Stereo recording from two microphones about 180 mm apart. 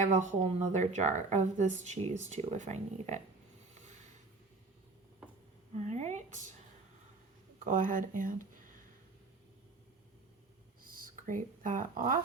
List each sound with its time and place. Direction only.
0.0 s speech: 40° right (ahead or behind)
5.7 s speech: 40° right (ahead or behind)
7.6 s speech: 45° right (ahead or behind)
10.8 s speech: 50° right (ahead or behind)